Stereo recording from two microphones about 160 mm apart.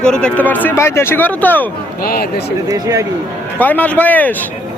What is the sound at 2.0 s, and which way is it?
Speech, 70° left (ahead or behind).